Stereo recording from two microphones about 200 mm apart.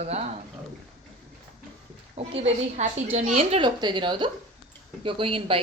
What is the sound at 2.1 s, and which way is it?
A woman's voice, 30° right (ahead or behind).